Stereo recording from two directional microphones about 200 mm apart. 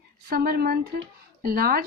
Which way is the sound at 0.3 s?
50° right (ahead or behind).